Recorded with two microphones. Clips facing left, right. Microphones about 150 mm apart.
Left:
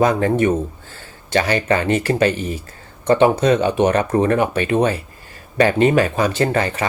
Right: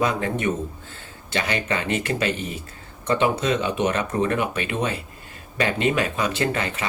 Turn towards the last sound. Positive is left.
turn(degrees=40)  # may be behind; listen again after turning